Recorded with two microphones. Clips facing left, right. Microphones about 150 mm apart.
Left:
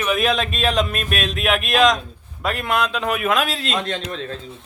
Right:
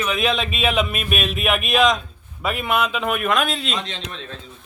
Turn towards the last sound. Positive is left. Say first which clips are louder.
# left 6 dB
turn(degrees=45)  # may be behind; listen again after turning